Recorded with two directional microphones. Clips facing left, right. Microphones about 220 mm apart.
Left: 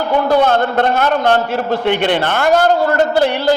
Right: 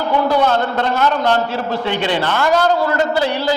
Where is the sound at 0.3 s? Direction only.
50° left (ahead or behind).